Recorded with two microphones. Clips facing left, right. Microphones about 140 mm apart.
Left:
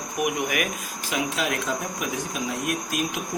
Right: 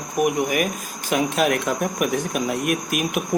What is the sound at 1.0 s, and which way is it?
Speech, 55° right (ahead or behind).